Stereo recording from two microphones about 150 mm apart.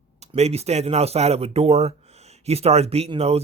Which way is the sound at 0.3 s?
45° right (ahead or behind).